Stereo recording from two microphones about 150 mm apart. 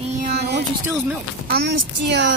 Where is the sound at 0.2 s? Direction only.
90° right.